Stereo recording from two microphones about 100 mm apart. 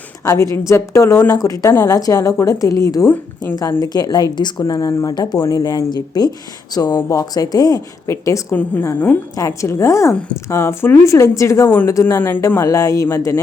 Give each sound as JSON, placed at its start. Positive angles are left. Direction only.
{"t": 0.3, "sound": "a woman's voice", "side_deg": 30}
{"t": 1.7, "sound": "a woman's voice", "side_deg": 25}
{"t": 2.0, "sound": "a woman's voice", "side_deg": 35}
{"t": 5.6, "sound": "speech", "side_deg": 45}
{"t": 7.1, "sound": "a woman's voice", "side_deg": 35}